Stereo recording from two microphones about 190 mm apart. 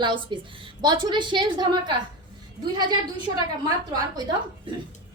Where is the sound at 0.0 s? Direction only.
25° right (ahead or behind).